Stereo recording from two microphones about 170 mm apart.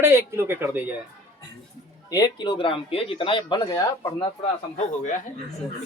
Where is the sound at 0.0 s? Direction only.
15° right (ahead or behind).